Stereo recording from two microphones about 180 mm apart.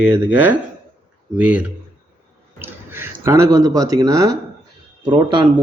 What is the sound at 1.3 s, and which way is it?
Speech, 10° right (ahead or behind).